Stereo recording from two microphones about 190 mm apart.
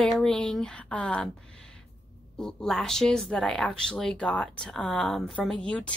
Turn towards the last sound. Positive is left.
turn(degrees=5)  # may be behind; listen again after turning